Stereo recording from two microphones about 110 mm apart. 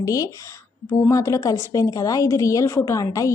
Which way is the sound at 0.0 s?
30° left (ahead or behind).